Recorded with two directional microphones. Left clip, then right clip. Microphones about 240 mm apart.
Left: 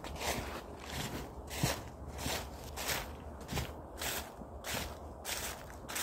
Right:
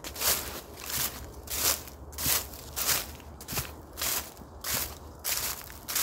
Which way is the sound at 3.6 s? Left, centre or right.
Centre.